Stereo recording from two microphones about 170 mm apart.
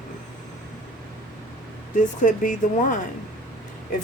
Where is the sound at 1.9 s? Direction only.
45° left (ahead or behind).